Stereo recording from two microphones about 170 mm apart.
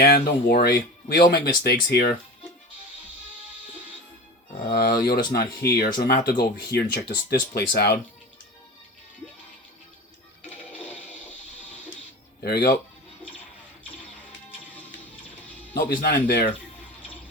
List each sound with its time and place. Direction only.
0.0 s speech: 65° left (ahead or behind)
4.8 s speech: 65° left (ahead or behind)
12.4 s speech: 70° left (ahead or behind)
15.7 s speech: 60° left (ahead or behind)